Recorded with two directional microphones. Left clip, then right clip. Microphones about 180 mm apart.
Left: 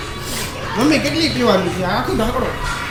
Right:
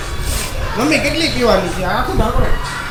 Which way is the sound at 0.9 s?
5° left (ahead or behind).